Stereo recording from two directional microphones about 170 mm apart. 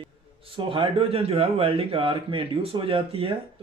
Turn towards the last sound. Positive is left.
turn(degrees=-30)  # may be behind; listen again after turning